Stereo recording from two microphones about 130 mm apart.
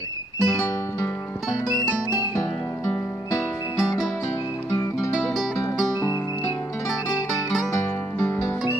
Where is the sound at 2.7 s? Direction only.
20° left (ahead or behind).